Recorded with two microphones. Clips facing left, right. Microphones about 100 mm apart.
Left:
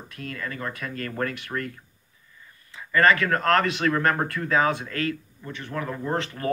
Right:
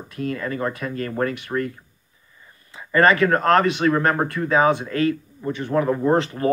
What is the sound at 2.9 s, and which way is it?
Speech, 25° right (ahead or behind).